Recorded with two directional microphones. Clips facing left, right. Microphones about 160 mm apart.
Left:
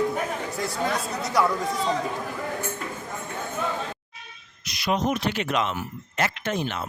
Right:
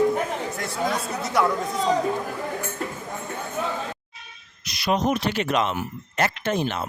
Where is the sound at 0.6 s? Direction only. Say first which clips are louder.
Left 1 dB; centre (ahead or behind).